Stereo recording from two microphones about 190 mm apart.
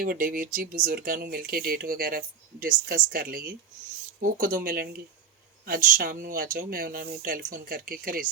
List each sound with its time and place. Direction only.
0.0 s speech: 50° right (ahead or behind)